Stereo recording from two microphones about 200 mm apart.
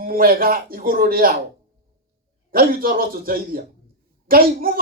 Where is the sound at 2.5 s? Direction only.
45° right (ahead or behind).